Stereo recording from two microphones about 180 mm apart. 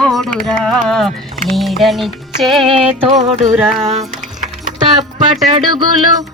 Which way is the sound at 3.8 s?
40° right (ahead or behind).